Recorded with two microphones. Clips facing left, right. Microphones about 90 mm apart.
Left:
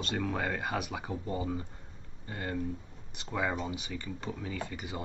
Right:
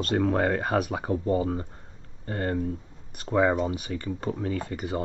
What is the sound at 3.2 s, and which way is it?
Speech, 40° right (ahead or behind).